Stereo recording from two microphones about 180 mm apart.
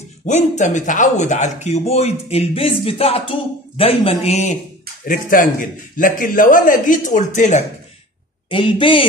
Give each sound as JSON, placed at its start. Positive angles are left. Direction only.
{"t": 0.3, "sound": "speech", "side_deg": 40}
{"t": 5.0, "sound": "a man's voice", "side_deg": 50}
{"t": 8.5, "sound": "a man's voice", "side_deg": 30}